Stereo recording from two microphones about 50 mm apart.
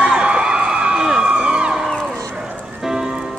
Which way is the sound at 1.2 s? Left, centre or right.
Centre.